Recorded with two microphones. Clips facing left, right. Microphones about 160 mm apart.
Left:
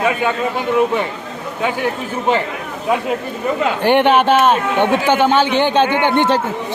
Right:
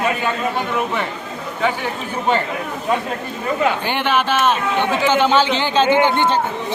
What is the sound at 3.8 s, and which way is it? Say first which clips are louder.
A man's voice: left 7 dB; 60° left (ahead or behind).